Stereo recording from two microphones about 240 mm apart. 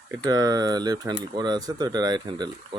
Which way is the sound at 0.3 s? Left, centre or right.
Centre.